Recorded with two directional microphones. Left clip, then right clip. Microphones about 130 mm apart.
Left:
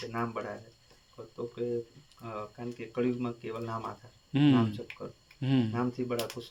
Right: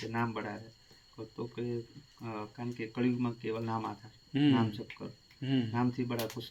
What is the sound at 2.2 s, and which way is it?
Speech, 30° left (ahead or behind).